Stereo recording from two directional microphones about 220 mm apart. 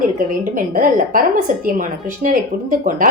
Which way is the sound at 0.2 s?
40° right (ahead or behind).